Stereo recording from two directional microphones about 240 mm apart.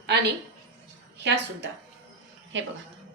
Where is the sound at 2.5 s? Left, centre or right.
Right.